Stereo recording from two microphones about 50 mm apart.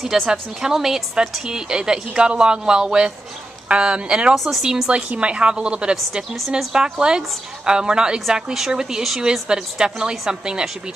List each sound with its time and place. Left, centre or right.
0.0 s a woman's voice: centre
4.5 s a woman's voice: centre